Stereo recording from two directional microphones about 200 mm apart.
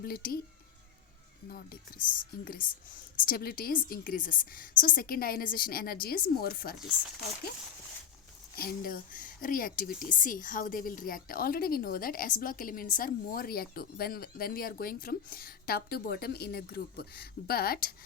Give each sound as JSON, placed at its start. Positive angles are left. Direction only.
{"t": 0.0, "sound": "speech", "side_deg": 50}
{"t": 1.5, "sound": "speech", "side_deg": 45}
{"t": 8.5, "sound": "speech", "side_deg": 45}